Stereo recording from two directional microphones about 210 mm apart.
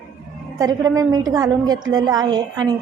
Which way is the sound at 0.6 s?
15° right (ahead or behind).